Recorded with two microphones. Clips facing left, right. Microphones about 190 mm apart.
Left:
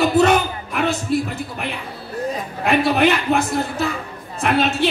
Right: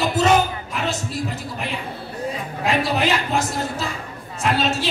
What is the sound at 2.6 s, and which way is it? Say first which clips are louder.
A man's voice: left 5 dB; 60° left (ahead or behind).